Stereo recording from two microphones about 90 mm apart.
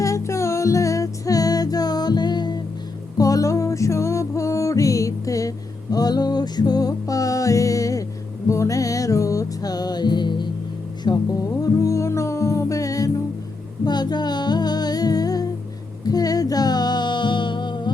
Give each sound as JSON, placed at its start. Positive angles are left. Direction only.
{"t": 0.0, "sound": "music", "side_deg": 35}
{"t": 3.2, "sound": "music", "side_deg": 40}
{"t": 11.6, "sound": "music", "side_deg": 35}
{"t": 13.8, "sound": "music", "side_deg": 50}